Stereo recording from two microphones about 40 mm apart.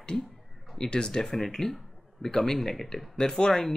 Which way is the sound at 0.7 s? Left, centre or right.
Left.